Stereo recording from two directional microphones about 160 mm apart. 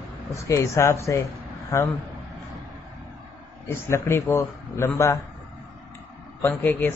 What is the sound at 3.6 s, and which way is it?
A man's voice, 15° left (ahead or behind).